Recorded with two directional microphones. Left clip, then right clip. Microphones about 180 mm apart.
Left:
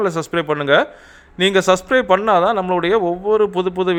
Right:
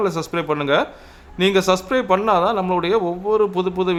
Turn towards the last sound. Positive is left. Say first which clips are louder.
# left 2 dB
turn(degrees=25)  # may be behind; listen again after turning